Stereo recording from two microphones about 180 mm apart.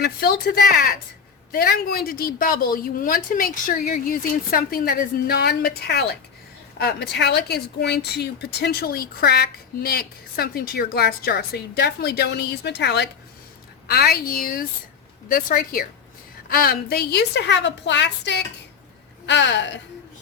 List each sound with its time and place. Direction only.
0.0 s a woman's voice: 55° left (ahead or behind); by 19.8 s 80° left